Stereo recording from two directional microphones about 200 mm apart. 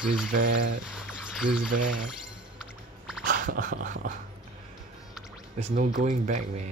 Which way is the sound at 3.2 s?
45° right (ahead or behind).